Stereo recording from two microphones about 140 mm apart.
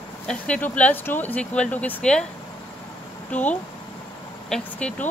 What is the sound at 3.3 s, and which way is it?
Speech, 10° left (ahead or behind).